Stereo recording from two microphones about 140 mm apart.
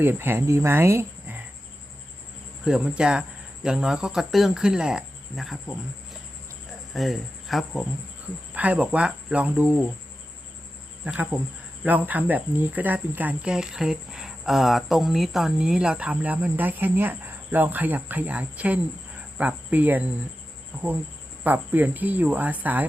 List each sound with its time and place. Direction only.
0.0 s speech: 15° right (ahead or behind)
2.6 s speech: 5° right (ahead or behind)
6.9 s speech: centre (ahead or behind)
11.0 s speech: 10° right (ahead or behind)
20.7 s cricket: 10° right (ahead or behind)
21.4 s speech: 10° right (ahead or behind)